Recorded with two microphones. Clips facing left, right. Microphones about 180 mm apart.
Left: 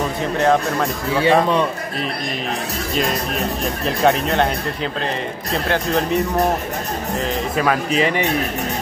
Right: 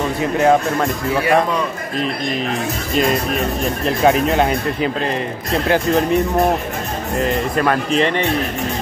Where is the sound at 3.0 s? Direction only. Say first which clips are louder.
Right 4 dB; centre (ahead or behind).